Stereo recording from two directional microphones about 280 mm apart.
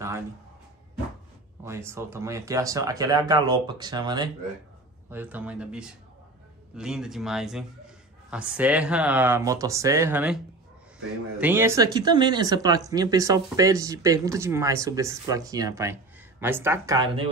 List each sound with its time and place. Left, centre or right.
1.6 s a man's voice: centre